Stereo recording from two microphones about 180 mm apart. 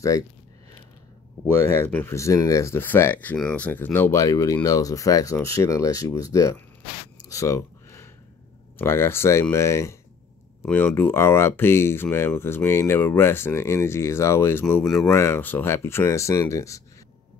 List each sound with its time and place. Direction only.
1.8 s speech: 10° left (ahead or behind)
7.2 s a sound: 20° left (ahead or behind)
8.7 s speech: 15° left (ahead or behind)